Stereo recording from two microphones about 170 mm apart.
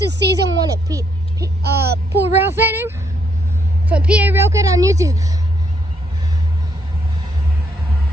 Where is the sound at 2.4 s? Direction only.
15° right (ahead or behind).